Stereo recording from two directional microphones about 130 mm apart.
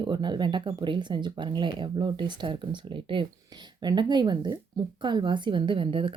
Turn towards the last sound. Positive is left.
turn(degrees=-45)  # may be behind; listen again after turning